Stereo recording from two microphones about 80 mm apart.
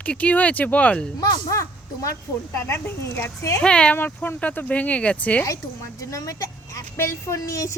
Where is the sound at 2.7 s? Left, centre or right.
Left.